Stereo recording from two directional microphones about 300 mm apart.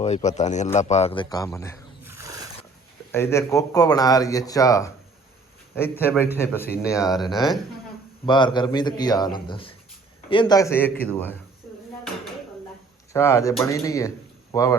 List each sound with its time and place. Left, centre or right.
0.0 s speech: left
2.0 s roaring cats: centre
3.1 s speech: centre
8.3 s speech: centre
13.1 s speech: centre